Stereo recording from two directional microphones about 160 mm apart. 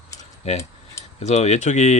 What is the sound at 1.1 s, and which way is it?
Speech, 45° left (ahead or behind).